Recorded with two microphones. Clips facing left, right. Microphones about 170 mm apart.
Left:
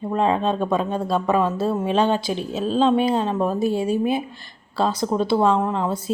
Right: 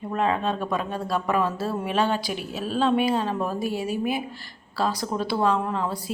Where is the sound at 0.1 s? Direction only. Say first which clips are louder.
Left 4 dB; 25° left (ahead or behind).